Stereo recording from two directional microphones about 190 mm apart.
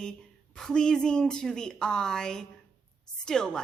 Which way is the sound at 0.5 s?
5° left (ahead or behind).